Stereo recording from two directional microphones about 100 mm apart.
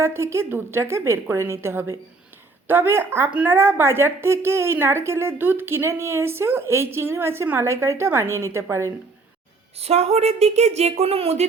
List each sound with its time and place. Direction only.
0.0 s a woman's voice: 25° right (ahead or behind)
9.7 s a woman's voice: 90° right